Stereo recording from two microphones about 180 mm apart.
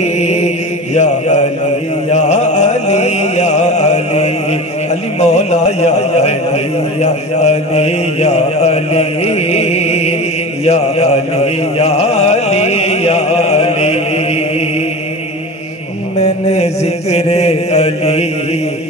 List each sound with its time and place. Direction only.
0.0 s mantra: 40° left (ahead or behind)
2.0 s music: 40° left (ahead or behind)
5.2 s a man's voice: 40° left (ahead or behind)
10.6 s music: 35° left (ahead or behind)
16.2 s mantra: 35° left (ahead or behind)